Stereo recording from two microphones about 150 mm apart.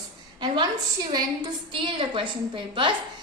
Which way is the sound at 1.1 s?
30° right (ahead or behind).